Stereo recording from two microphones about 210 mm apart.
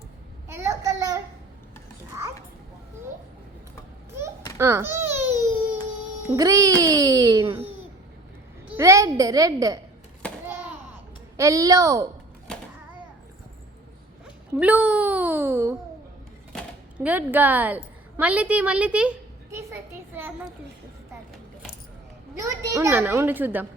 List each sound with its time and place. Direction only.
0.4 s child singing: 15° right (ahead or behind)
4.5 s a child's voice: 10° right (ahead or behind)
6.2 s a child's voice: 15° right (ahead or behind)
11.3 s a child's voice: 15° right (ahead or behind)
14.6 s a child's voice: 5° right (ahead or behind)
16.5 s cash register: 5° left (ahead or behind)
17.1 s a woman's voice: 10° right (ahead or behind)
22.4 s a child's voice: 15° right (ahead or behind)